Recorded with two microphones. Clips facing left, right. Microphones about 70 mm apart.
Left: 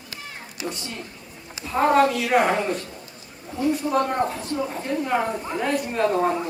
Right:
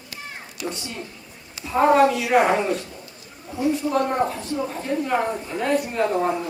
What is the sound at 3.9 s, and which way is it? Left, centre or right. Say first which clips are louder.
A woman's voice: right 1 dB; centre.